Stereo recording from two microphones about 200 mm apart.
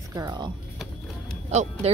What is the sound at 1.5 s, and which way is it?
Speech, 35° right (ahead or behind).